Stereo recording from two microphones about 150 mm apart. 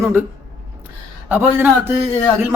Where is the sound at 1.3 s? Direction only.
10° right (ahead or behind).